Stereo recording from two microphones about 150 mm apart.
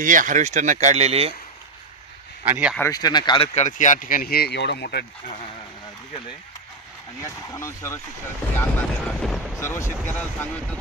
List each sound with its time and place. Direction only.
0.0 s speech: 60° right (ahead or behind); by 1.3 s 45° right (ahead or behind)
2.4 s speech: 10° right (ahead or behind)
2.8 s speech: 25° left (ahead or behind)
3.5 s speech: 55° left (ahead or behind); by 5.0 s 90° left
7.2 s speech: 20° left (ahead or behind)
8.5 s speech: 5° left (ahead or behind)
9.6 s speech: 20° left (ahead or behind)